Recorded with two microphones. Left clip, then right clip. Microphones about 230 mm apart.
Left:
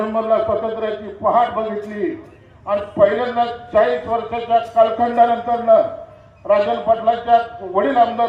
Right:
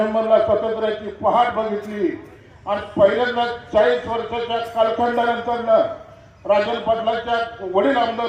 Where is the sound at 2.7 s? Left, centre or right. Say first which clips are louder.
Left 1 dB; right.